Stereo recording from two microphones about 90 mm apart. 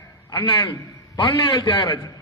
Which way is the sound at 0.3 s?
60° left (ahead or behind).